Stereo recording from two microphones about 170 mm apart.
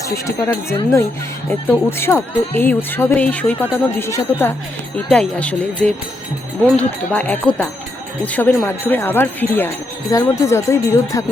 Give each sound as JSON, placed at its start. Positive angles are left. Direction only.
{"t": 0.0, "sound": "speech", "side_deg": 15}